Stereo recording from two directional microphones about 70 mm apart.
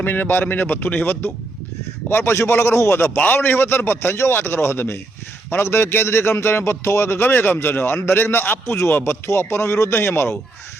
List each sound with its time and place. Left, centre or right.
0.0 s a man's voice: left